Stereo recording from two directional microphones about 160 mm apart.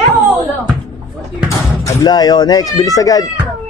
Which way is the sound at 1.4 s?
20° left (ahead or behind).